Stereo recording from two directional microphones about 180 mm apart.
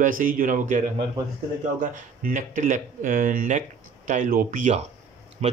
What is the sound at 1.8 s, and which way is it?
Speech, 50° right (ahead or behind).